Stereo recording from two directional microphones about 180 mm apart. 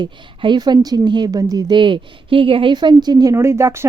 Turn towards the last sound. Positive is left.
turn(degrees=-15)  # may be behind; listen again after turning